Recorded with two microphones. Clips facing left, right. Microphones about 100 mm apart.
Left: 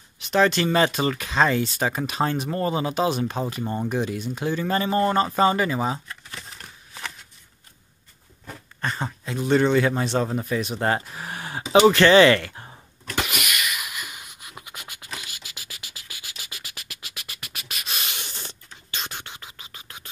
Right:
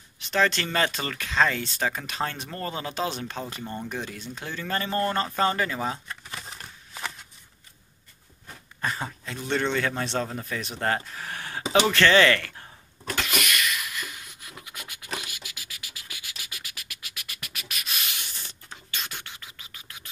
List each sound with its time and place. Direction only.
0.3 s speech: 15° left (ahead or behind)
6.0 s a sound: 10° right (ahead or behind)
8.8 s speech: centre (ahead or behind); by 12.7 s 25° left (ahead or behind)
13.1 s a sound: 10° left (ahead or behind); by 15.0 s 25° left (ahead or behind)
15.3 s music: 30° left (ahead or behind)
18.5 s scratch: 25° left (ahead or behind)